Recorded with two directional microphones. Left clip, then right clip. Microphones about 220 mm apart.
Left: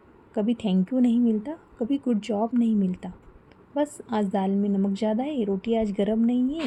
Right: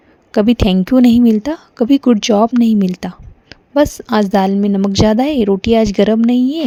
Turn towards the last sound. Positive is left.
turn(degrees=-45)  # may be behind; listen again after turning